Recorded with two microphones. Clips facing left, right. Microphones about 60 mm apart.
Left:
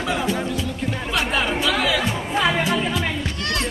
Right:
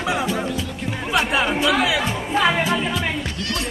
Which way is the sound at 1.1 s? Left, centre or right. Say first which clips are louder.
Right 3 dB; centre.